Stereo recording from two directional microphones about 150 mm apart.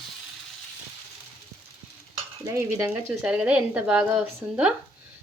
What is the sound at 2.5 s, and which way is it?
Stir, 20° right (ahead or behind).